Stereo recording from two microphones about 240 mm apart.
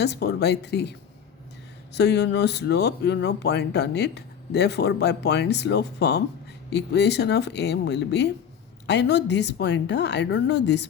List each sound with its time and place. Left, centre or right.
0.0 s speech: left